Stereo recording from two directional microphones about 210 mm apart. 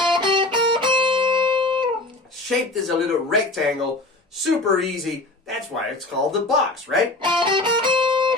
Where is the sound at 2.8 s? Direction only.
Centre (ahead or behind).